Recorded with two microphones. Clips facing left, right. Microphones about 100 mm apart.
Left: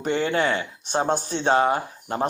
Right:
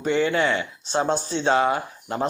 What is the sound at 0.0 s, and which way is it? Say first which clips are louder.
Speech: right 1 dB; 45° left (ahead or behind).